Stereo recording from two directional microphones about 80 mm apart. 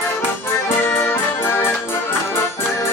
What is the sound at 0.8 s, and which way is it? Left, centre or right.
Accordion, left.